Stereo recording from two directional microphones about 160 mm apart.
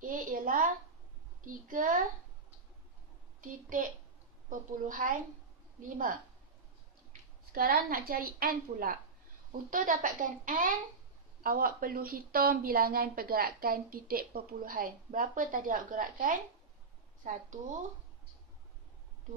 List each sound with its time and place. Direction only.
0.0 s a sound: 55° right (ahead or behind)
1.4 s a woman's voice: 55° right (ahead or behind)
3.3 s a woman's voice: 55° right (ahead or behind)